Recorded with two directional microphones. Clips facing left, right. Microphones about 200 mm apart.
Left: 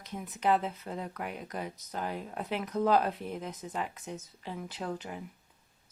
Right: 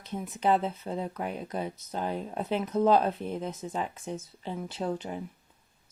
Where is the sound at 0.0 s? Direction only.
30° right (ahead or behind).